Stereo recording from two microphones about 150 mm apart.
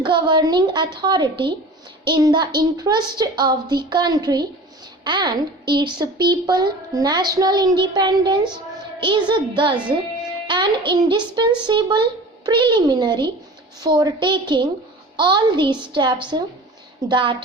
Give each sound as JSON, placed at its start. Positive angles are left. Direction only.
{"t": 0.0, "sound": "a woman's voice", "side_deg": -30}